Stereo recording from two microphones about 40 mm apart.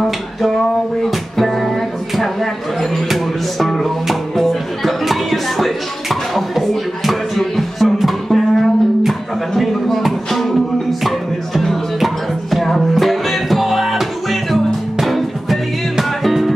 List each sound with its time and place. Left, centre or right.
2.8 s music: centre